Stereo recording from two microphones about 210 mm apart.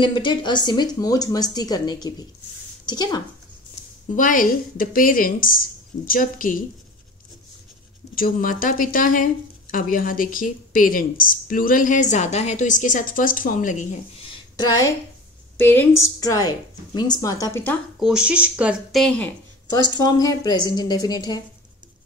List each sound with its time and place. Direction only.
0.0 s a woman's voice: 20° left (ahead or behind)
4.1 s speech: 40° left (ahead or behind)
8.1 s speech: 40° left (ahead or behind)
14.3 s a sound: 20° left (ahead or behind)
15.5 s a woman's voice: 10° left (ahead or behind)
17.9 s speech: 5° right (ahead or behind)
20.0 s speech: 15° left (ahead or behind)